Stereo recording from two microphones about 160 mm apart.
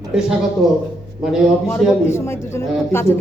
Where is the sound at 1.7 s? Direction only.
15° left (ahead or behind).